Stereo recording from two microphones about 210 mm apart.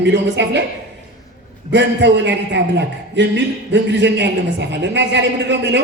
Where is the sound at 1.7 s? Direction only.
55° right (ahead or behind).